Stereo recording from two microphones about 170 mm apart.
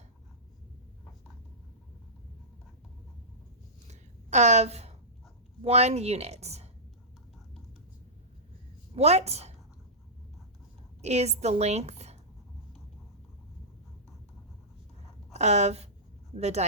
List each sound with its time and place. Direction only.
3.8 s a sound: 40° right (ahead or behind)
5.6 s a woman's voice: 40° right (ahead or behind)
9.0 s a woman's voice: 40° right (ahead or behind)
11.0 s a woman's voice: 40° right (ahead or behind)
15.3 s a woman's voice: 40° right (ahead or behind)